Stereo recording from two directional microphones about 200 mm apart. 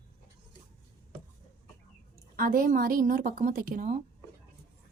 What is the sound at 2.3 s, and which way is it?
A woman's voice, 45° right (ahead or behind).